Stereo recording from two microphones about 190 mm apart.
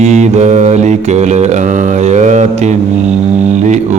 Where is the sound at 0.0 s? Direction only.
35° right (ahead or behind).